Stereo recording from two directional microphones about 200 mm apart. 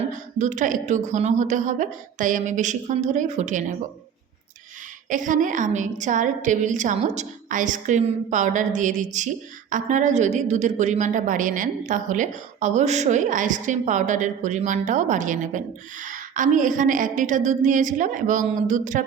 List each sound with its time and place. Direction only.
0.3 s a woman's voice: 40° right (ahead or behind)
5.0 s a woman's voice: 40° right (ahead or behind)